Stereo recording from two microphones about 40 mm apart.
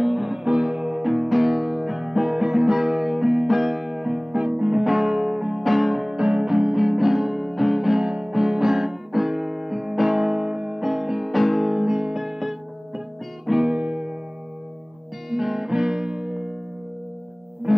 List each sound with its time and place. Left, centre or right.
0.0 s music: centre
0.4 s music: centre
4.7 s music: centre
6.1 s music: right; by 8.0 s centre
8.0 s music: centre
11.8 s music: centre
13.7 s music: right
15.2 s music: centre
17.7 s music: centre